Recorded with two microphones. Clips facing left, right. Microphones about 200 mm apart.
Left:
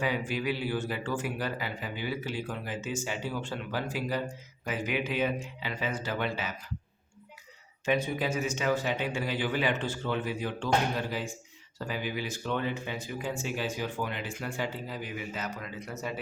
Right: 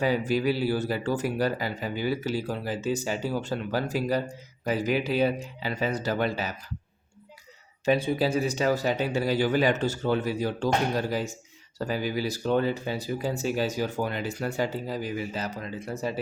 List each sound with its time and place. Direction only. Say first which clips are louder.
0.0 s speech: right 6 dB; 40° right (ahead or behind)
7.9 s speech: right 5 dB; 30° right (ahead or behind)